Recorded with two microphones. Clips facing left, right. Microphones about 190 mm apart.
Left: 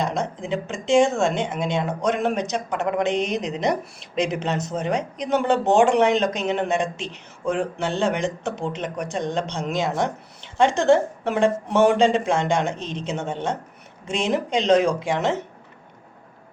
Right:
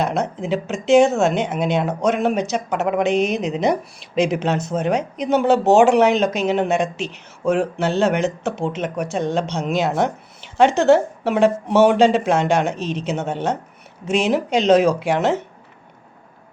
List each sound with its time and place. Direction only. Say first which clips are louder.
0.0 s speech: right 4 dB; 5° right (ahead or behind)
3.1 s speech: right 5 dB; 30° left (ahead or behind)
3.3 s speech: right 4 dB; 5° right (ahead or behind)